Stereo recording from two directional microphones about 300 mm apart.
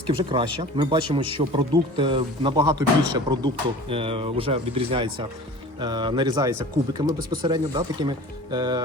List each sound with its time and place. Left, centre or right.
0.1 s speech: centre